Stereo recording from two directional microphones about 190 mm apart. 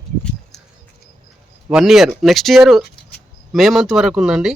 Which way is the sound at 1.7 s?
5° right (ahead or behind).